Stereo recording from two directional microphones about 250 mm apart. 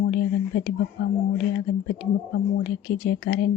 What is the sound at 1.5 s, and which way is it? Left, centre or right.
Speech, left.